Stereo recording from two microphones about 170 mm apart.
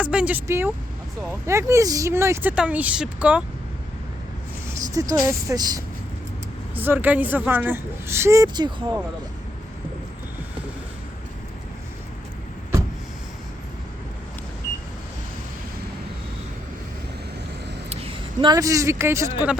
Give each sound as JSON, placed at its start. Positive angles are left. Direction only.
{"t": 0.0, "sound": "speech", "side_deg": -5}
{"t": 4.9, "sound": "speech", "side_deg": -20}
{"t": 6.7, "sound": "speech", "side_deg": -10}
{"t": 17.8, "sound": "a man's voice", "side_deg": -35}